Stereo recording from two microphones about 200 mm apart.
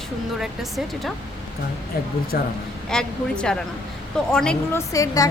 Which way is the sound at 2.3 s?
45° left (ahead or behind).